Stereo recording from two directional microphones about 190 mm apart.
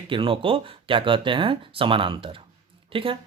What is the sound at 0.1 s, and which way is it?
Speech, 30° right (ahead or behind).